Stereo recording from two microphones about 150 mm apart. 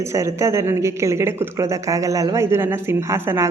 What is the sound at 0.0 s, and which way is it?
A woman's voice, 20° right (ahead or behind).